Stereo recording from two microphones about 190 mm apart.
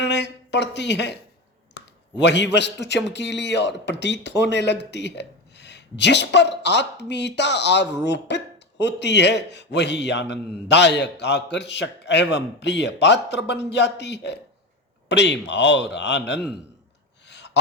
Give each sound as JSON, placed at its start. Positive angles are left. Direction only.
{"t": 0.0, "sound": "a sound", "side_deg": 65}
{"t": 2.1, "sound": "a man's voice", "side_deg": 65}
{"t": 17.2, "sound": "gasp", "side_deg": 65}